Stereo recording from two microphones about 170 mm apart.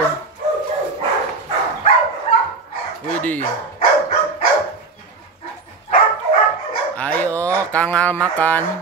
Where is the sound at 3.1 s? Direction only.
10° left (ahead or behind).